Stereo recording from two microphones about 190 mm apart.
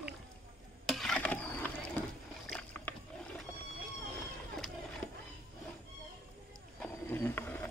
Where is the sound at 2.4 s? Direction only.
5° left (ahead or behind).